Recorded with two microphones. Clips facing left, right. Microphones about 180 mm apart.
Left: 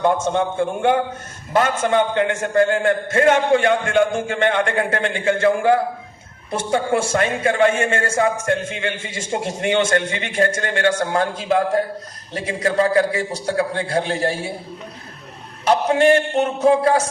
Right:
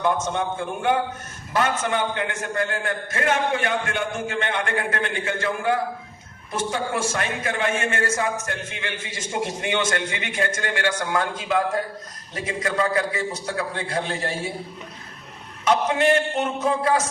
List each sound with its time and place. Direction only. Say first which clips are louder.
0.0 s a man's voice: left 5 dB; 30° left (ahead or behind)
15.6 s a man's voice: left 4 dB; 35° left (ahead or behind)